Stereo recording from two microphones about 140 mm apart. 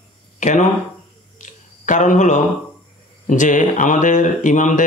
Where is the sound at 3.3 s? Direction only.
65° left (ahead or behind).